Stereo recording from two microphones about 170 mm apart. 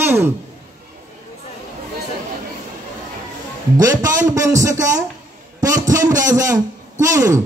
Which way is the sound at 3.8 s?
20° right (ahead or behind).